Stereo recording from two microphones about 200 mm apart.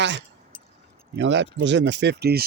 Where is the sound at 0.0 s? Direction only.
60° right (ahead or behind).